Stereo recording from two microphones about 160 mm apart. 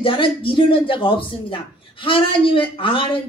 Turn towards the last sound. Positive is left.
turn(degrees=35)  # may be behind; listen again after turning